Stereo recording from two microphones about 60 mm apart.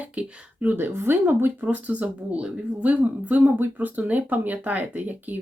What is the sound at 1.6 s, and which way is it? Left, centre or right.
Speech, right.